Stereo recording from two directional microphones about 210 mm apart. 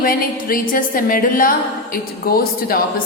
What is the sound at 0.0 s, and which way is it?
A woman's voice, 45° left (ahead or behind).